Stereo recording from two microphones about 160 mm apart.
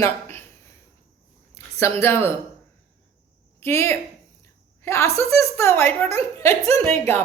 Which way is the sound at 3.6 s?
15° left (ahead or behind).